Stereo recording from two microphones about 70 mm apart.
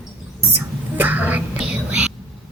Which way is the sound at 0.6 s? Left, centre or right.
Right.